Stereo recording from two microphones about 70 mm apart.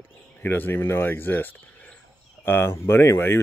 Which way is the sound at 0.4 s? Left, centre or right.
Left.